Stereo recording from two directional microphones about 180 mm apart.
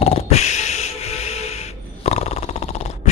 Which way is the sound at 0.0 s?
35° left (ahead or behind).